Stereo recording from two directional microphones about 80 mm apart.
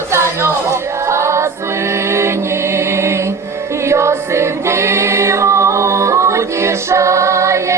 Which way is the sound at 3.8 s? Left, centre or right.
Right.